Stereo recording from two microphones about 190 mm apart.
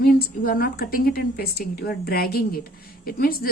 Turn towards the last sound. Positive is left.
turn(degrees=50)  # may be behind; listen again after turning